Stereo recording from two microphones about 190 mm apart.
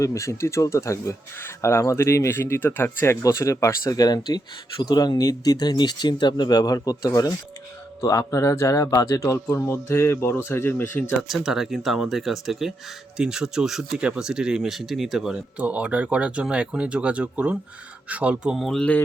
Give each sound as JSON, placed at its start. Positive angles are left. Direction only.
{"t": 0.0, "sound": "speech", "side_deg": 15}
{"t": 11.2, "sound": "speech", "side_deg": 0}